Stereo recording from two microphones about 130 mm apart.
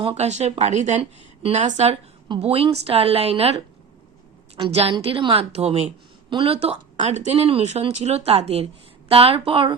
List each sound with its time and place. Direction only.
0.0 s speech: 50° right (ahead or behind)
1.4 s speech: 50° right (ahead or behind)
1.6 s a woman's voice: 60° right (ahead or behind)
7.1 s a woman's voice: 60° right (ahead or behind); by 9.7 s 45° right (ahead or behind)